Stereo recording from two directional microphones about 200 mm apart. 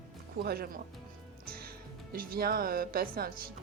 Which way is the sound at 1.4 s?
50° right (ahead or behind).